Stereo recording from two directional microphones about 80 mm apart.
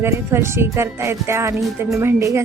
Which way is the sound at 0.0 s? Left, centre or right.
Right.